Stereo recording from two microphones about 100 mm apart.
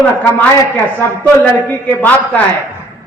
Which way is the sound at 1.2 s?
15° left (ahead or behind).